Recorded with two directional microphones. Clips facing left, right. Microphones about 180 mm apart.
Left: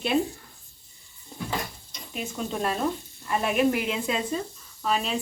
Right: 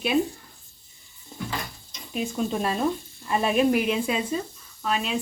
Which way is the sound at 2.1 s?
20° right (ahead or behind).